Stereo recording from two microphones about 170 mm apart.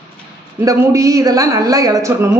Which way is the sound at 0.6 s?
20° right (ahead or behind).